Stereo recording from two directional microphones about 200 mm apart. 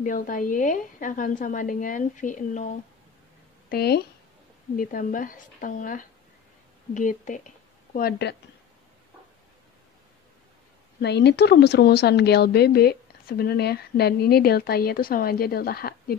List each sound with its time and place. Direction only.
0.0 s a woman's voice: 40° left (ahead or behind)
3.6 s speech: 50° left (ahead or behind)
4.7 s a woman's voice: 45° left (ahead or behind)
11.0 s a woman's voice: 55° left (ahead or behind)